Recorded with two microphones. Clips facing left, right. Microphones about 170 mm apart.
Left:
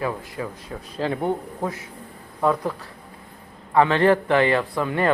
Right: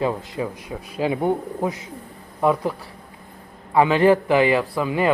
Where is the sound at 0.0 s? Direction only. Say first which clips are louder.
Right 4 dB; 20° right (ahead or behind).